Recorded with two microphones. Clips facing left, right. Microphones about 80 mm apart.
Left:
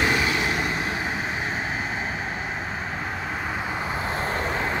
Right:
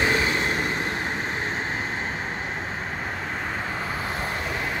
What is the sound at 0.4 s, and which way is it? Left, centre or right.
Vehicle, centre.